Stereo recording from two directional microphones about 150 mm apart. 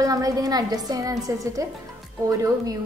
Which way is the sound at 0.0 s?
25° right (ahead or behind).